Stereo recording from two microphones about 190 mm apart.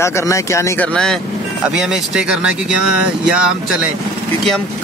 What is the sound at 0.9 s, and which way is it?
Speech, 5° left (ahead or behind).